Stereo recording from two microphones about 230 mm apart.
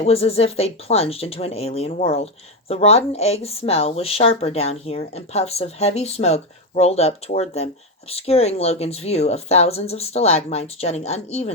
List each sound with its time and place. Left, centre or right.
0.0 s speech: left